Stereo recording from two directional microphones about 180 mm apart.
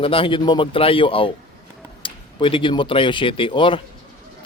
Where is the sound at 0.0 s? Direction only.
30° left (ahead or behind).